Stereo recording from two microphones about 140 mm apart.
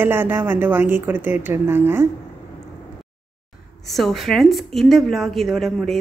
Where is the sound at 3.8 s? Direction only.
Centre (ahead or behind).